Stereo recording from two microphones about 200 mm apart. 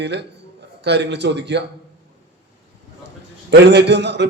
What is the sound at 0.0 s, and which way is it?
A man's voice, 60° right (ahead or behind).